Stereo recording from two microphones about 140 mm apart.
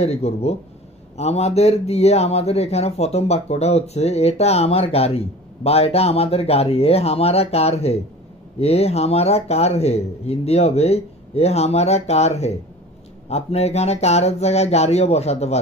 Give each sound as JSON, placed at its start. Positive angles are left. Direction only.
{"t": 0.0, "sound": "speech", "side_deg": 50}